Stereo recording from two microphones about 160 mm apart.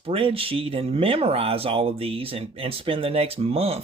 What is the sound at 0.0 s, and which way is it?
Speech, 35° right (ahead or behind).